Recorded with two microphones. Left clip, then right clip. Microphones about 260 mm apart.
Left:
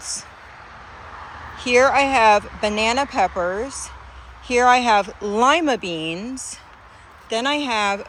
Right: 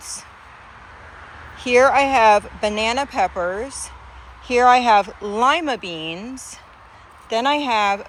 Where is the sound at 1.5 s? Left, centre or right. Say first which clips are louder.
Right 1 dB; centre.